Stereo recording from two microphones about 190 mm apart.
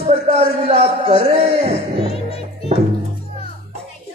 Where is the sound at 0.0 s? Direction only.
35° right (ahead or behind).